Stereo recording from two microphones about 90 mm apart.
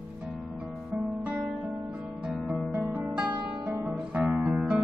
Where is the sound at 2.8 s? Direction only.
10° right (ahead or behind).